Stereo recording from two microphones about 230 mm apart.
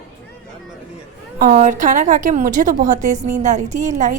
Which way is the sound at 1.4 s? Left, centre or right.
Right.